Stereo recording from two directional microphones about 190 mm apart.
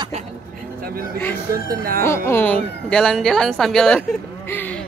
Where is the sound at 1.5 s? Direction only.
50° right (ahead or behind).